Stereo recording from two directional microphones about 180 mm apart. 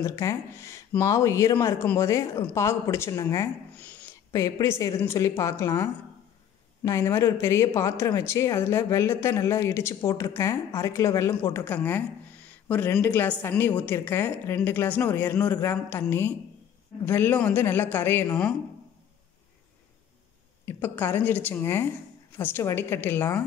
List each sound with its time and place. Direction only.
0.0 s speech: 15° left (ahead or behind)
20.6 s speech: 10° left (ahead or behind)